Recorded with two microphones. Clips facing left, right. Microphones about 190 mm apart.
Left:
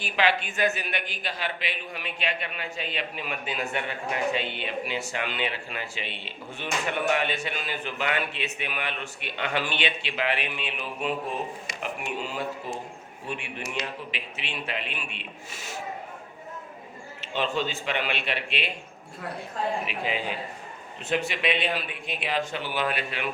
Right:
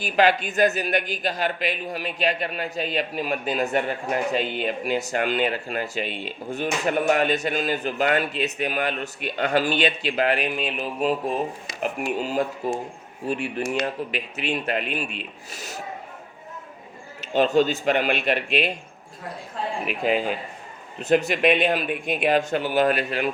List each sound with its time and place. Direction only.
0.0 s a man's voice: 40° right (ahead or behind)
17.2 s speech: 40° right (ahead or behind)
19.9 s speech: 45° right (ahead or behind)